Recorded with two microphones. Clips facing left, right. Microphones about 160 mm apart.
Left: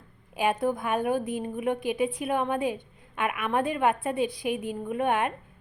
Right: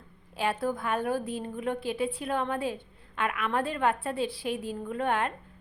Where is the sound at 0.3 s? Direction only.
15° left (ahead or behind).